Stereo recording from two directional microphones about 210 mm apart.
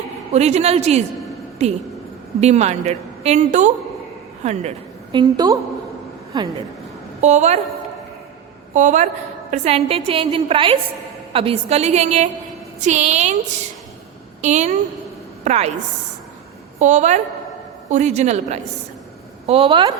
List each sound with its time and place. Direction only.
0.3 s a woman's voice: 30° right (ahead or behind)
5.1 s a woman's voice: 20° right (ahead or behind)
7.2 s a woman's voice: 35° right (ahead or behind)
8.7 s a woman's voice: 35° right (ahead or behind)
14.4 s a woman's voice: 35° right (ahead or behind)
16.8 s a woman's voice: 35° right (ahead or behind)